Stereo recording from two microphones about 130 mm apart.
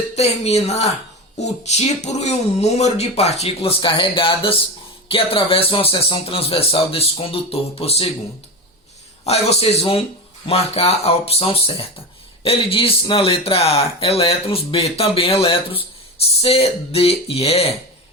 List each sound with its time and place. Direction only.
0.2 s a woman's voice: 55° left (ahead or behind)
9.2 s speech: 55° left (ahead or behind)